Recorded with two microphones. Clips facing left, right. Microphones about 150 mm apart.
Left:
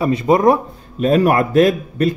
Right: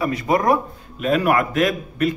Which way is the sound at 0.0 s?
25° left (ahead or behind).